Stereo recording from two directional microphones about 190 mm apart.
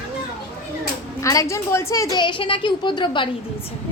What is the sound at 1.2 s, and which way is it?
A woman's voice, 15° left (ahead or behind).